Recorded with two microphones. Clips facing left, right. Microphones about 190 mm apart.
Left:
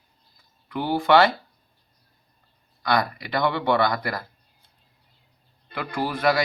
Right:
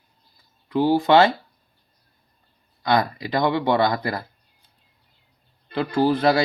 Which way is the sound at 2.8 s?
25° right (ahead or behind).